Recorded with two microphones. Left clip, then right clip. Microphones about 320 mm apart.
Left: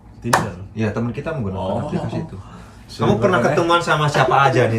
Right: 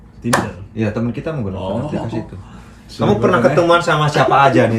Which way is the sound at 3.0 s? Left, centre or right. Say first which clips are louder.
Right 3 dB; centre.